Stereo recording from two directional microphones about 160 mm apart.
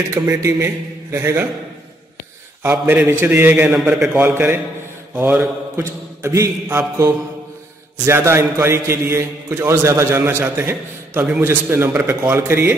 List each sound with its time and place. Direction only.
0.1 s a man's voice: 15° right (ahead or behind)
2.6 s a man's voice: 10° right (ahead or behind)
5.1 s mantra: 5° right (ahead or behind)
5.8 s a man's voice: 15° right (ahead or behind)